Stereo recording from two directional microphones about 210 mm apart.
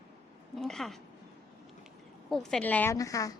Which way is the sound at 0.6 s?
Centre (ahead or behind).